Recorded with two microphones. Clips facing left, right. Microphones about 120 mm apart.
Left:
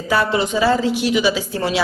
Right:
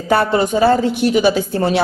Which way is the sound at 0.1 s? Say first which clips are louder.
Right 4 dB; 50° right (ahead or behind).